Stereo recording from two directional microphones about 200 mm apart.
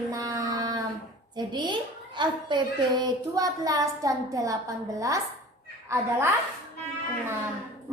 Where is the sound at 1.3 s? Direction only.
20° right (ahead or behind).